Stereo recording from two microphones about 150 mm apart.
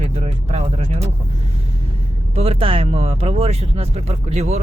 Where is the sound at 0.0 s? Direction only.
50° right (ahead or behind).